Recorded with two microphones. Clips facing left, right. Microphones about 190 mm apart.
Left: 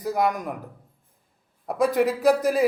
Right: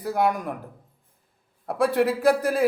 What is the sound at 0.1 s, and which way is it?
Speech, centre (ahead or behind).